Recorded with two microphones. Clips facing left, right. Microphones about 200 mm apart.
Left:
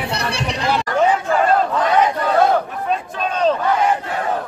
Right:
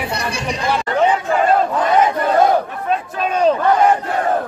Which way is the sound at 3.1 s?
10° right (ahead or behind).